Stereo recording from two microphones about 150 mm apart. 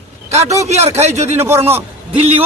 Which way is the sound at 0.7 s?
45° right (ahead or behind).